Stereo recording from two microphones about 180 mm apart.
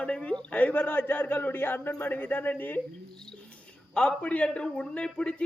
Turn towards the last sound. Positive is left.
turn(degrees=5)  # may be behind; listen again after turning